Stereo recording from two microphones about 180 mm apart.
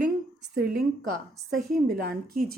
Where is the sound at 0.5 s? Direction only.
Centre (ahead or behind).